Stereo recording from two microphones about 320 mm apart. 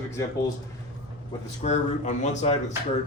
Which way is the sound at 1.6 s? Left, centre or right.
Left.